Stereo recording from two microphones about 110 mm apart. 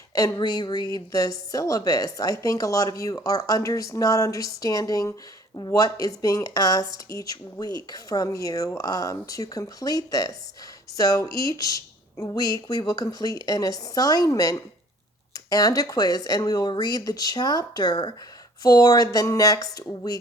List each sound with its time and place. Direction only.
0.1 s speech: 35° left (ahead or behind)
12.4 s speech: 35° left (ahead or behind)